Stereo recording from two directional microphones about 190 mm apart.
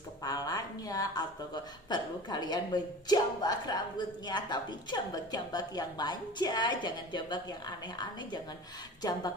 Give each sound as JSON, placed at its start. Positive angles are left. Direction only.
{"t": 0.2, "sound": "a woman's voice", "side_deg": 20}